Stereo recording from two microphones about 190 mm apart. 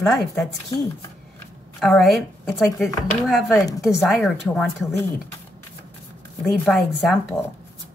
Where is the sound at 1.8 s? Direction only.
Centre (ahead or behind).